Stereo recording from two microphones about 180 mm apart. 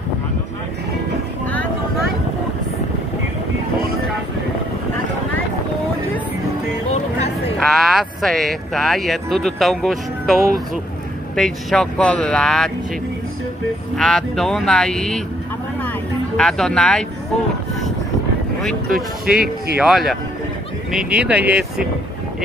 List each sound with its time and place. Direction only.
6.9 s a sound: 35° left (ahead or behind)
7.6 s speech: centre (ahead or behind)
13.9 s speech: 5° left (ahead or behind)
16.3 s speech: centre (ahead or behind)
18.9 s speech: 55° right (ahead or behind)
19.8 s speech: centre (ahead or behind)